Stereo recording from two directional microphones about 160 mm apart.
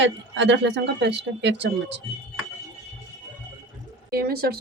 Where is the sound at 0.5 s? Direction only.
90° right.